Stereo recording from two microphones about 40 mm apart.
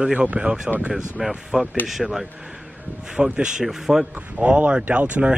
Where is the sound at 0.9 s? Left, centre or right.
Centre.